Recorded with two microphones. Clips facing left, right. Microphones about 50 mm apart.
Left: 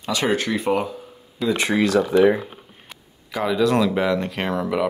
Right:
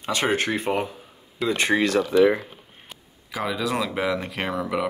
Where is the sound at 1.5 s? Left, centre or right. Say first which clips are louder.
Left 2 dB; right.